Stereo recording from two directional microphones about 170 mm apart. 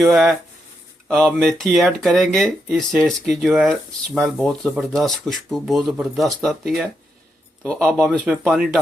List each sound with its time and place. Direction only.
0.0 s speech: centre (ahead or behind)